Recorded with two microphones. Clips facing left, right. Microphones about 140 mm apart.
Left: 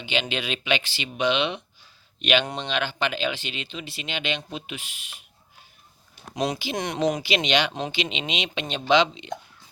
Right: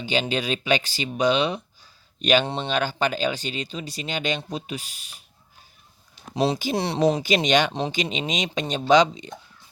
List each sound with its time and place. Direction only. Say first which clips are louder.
0.0 s speech: right 3 dB; 40° right (ahead or behind)
6.3 s speech: right 4 dB; 30° right (ahead or behind)